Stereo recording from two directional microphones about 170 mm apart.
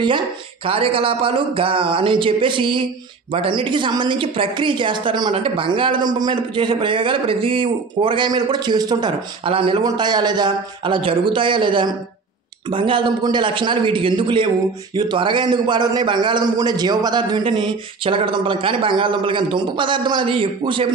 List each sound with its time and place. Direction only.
0.7 s speech: 35° right (ahead or behind)